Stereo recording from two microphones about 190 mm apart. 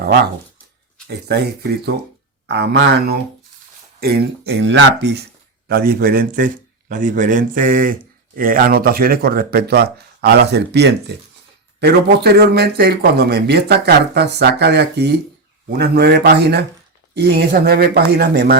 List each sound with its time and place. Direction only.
1.0 s speech: 60° right (ahead or behind)
5.6 s speech: 50° right (ahead or behind)